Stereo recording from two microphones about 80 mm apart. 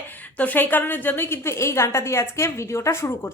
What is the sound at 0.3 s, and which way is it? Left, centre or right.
A woman's voice, left.